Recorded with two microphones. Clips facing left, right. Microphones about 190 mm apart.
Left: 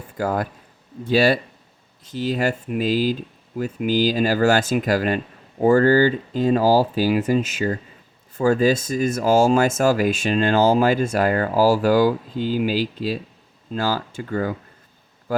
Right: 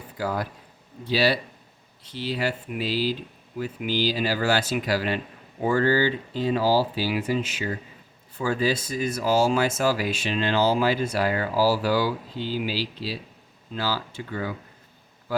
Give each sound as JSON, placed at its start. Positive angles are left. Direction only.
{"t": 0.2, "sound": "speech", "side_deg": 50}